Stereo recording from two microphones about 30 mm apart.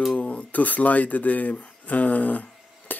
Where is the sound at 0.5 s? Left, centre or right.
Left.